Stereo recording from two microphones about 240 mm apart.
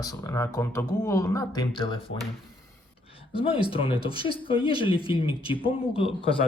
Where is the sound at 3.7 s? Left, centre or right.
Left.